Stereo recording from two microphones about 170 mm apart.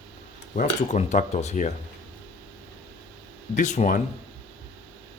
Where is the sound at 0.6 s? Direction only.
45° left (ahead or behind).